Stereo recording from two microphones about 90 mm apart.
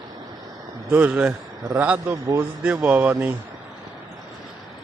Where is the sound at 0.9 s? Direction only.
15° right (ahead or behind).